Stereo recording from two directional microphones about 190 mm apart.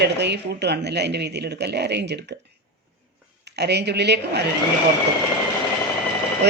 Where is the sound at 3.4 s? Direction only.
60° right (ahead or behind).